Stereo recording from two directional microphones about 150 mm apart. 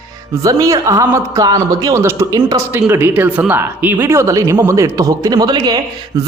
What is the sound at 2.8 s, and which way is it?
A man's voice, 10° right (ahead or behind).